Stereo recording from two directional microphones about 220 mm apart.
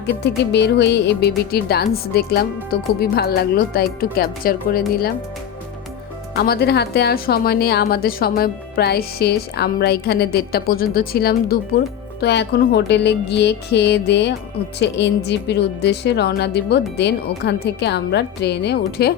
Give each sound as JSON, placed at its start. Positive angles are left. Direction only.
{"t": 0.0, "sound": "speech", "side_deg": 50}
{"t": 6.3, "sound": "speech", "side_deg": 45}